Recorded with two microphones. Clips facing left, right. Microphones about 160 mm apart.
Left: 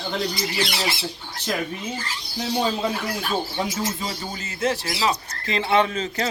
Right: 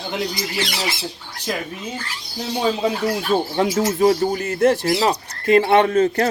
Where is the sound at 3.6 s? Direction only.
65° right (ahead or behind).